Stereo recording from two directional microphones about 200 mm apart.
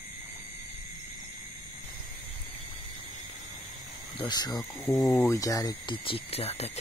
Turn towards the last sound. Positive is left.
turn(degrees=30)  # may be behind; listen again after turning